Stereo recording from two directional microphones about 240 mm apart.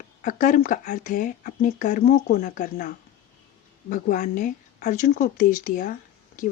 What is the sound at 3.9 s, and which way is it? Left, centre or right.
Speech, left.